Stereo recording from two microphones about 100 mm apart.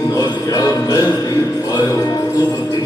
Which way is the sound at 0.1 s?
40° left (ahead or behind).